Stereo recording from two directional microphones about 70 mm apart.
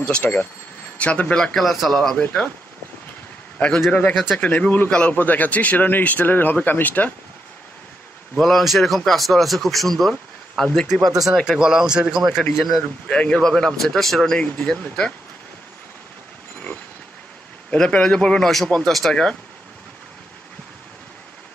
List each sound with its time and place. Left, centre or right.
0.2 s a man's voice: left; by 2.1 s centre
3.5 s a man's voice: centre
4.1 s speech: centre
4.4 s a man's voice: left
8.4 s speech: centre
10.9 s a man's voice: centre
12.5 s speech: centre
13.1 s speech: centre
14.4 s speech: centre
16.5 s a sound: left
17.6 s speech: centre
18.8 s speech: centre